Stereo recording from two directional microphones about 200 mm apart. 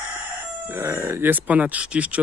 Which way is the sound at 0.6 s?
10° right (ahead or behind).